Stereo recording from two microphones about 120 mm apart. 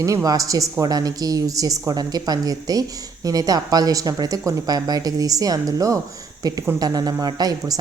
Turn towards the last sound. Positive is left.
turn(degrees=-30)  # may be behind; listen again after turning